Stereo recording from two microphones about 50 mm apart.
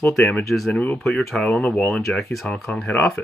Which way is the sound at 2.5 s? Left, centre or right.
Left.